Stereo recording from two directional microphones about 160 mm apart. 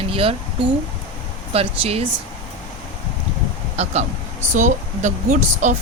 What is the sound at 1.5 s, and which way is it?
Speech, 40° right (ahead or behind).